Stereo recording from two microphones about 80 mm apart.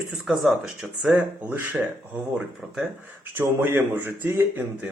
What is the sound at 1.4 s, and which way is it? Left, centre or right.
Speech, right.